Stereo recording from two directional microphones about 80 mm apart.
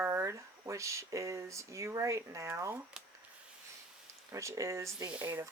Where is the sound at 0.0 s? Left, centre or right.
Right.